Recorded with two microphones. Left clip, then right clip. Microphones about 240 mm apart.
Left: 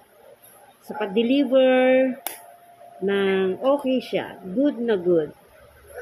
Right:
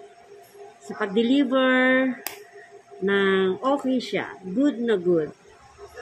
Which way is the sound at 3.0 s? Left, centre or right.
Centre.